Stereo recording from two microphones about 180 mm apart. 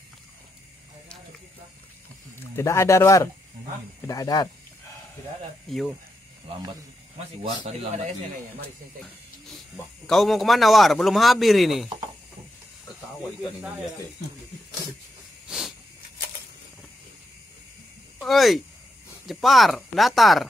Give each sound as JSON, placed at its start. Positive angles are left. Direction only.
{"t": 2.3, "sound": "speech", "side_deg": 15}
{"t": 5.7, "sound": "speech", "side_deg": 0}
{"t": 10.0, "sound": "speech", "side_deg": 0}
{"t": 13.4, "sound": "speech", "side_deg": -5}
{"t": 18.2, "sound": "speech", "side_deg": 0}